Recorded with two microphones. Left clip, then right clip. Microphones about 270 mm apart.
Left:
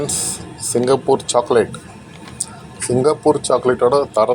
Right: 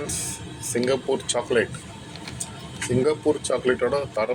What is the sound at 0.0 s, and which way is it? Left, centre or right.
Speech, centre.